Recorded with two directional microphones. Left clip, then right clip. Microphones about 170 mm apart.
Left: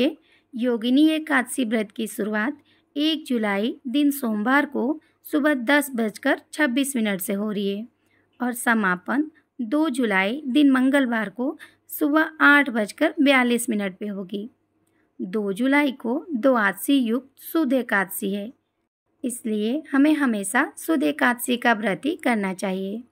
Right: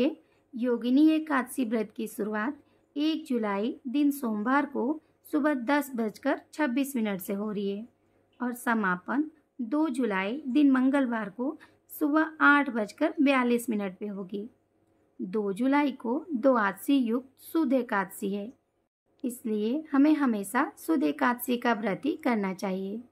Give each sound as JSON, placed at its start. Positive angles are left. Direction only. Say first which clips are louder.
{"t": 0.6, "sound": "a woman's voice", "louder": "left 5 dB", "side_deg": 15}